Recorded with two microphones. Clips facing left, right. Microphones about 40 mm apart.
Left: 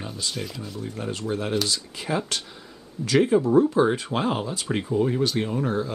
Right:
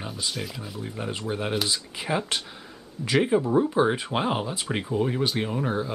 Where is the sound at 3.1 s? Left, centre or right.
Centre.